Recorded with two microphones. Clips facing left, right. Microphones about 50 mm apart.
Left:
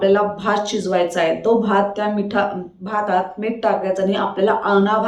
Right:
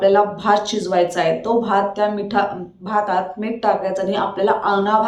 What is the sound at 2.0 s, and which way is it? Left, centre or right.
A woman's voice, centre.